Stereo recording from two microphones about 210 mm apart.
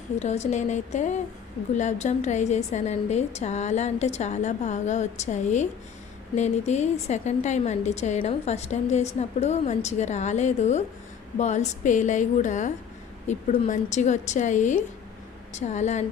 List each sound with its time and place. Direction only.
0.2 s a woman's voice: 35° left (ahead or behind)